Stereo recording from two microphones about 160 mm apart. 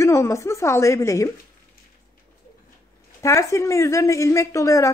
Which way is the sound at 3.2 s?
20° left (ahead or behind).